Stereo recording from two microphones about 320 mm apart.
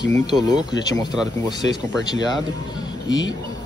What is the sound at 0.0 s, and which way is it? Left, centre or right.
Speech, centre.